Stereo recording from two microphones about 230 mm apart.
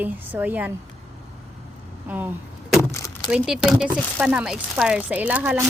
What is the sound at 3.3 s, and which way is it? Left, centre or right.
A woman's voice, centre.